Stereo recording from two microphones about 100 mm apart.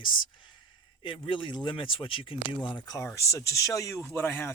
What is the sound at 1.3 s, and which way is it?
Speech, 50° left (ahead or behind).